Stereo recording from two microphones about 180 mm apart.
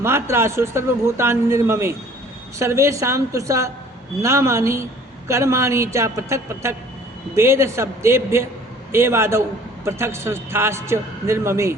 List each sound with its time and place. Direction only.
0.0 s a man's voice: 15° right (ahead or behind)